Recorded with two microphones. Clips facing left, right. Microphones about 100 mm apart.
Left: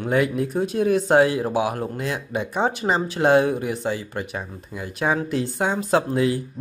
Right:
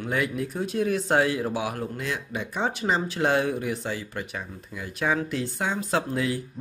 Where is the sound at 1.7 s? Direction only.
35° left (ahead or behind).